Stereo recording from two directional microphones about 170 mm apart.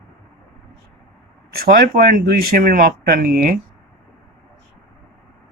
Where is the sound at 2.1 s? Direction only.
55° right (ahead or behind).